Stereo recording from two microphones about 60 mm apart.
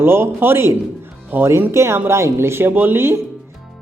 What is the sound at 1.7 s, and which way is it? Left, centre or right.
Speech, right.